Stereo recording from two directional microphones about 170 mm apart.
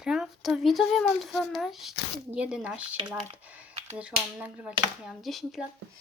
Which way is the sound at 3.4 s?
10° right (ahead or behind).